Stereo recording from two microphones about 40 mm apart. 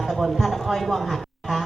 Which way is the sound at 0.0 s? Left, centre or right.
Centre.